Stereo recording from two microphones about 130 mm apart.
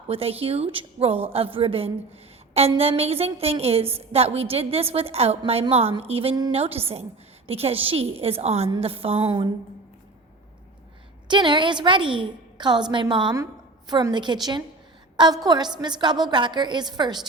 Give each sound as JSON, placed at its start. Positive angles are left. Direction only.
{"t": 0.1, "sound": "a woman's voice", "side_deg": -50}
{"t": 11.3, "sound": "a woman's voice", "side_deg": -35}
{"t": 13.3, "sound": "a woman's voice", "side_deg": -30}
{"t": 15.1, "sound": "a sound", "side_deg": -35}
{"t": 15.4, "sound": "a woman's voice", "side_deg": -35}